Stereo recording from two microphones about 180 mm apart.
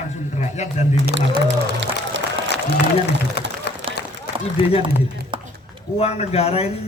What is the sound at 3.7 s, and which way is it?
Run, 65° left (ahead or behind).